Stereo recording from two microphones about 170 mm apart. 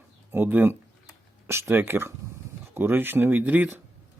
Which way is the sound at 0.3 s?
10° right (ahead or behind).